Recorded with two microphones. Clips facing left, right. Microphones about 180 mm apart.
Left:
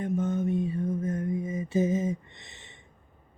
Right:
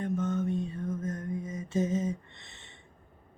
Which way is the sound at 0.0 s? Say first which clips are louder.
Left 2 dB; 15° left (ahead or behind).